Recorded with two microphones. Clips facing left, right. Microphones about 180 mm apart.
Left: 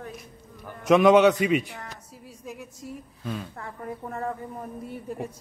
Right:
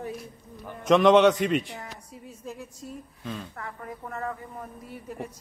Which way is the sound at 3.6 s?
30° left (ahead or behind).